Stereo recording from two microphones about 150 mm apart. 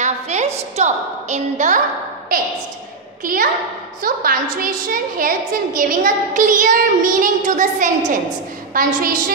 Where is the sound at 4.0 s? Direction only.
70° right (ahead or behind).